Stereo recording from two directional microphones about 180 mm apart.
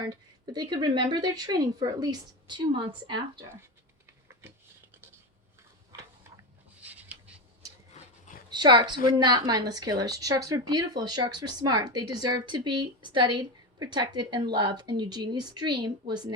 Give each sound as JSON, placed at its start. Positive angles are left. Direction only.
{"t": 0.1, "sound": "a woman's voice", "side_deg": -25}
{"t": 6.7, "sound": "a sound", "side_deg": -10}
{"t": 8.4, "sound": "a woman's voice", "side_deg": -25}